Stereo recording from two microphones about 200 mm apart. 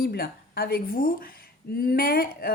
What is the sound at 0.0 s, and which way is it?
A woman's voice, 50° left (ahead or behind).